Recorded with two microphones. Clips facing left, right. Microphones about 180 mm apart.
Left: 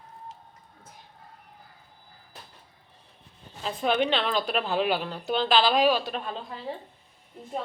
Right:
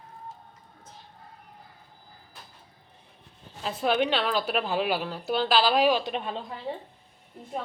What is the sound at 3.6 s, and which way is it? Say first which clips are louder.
A woman's voice: even; 5° right (ahead or behind).